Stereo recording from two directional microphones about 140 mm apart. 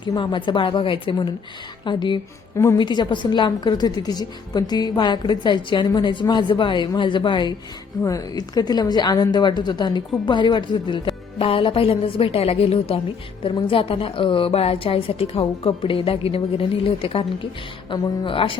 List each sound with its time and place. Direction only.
0.0 s a woman's voice: 35° left (ahead or behind)
17.9 s a woman's voice: 30° left (ahead or behind)